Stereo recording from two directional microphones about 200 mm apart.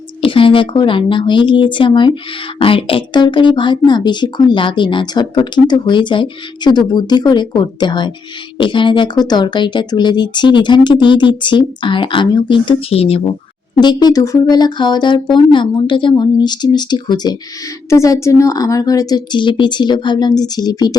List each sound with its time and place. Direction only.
0.2 s speech: 25° left (ahead or behind)